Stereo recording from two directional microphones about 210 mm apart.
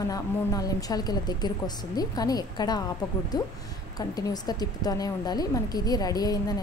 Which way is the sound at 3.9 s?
20° left (ahead or behind).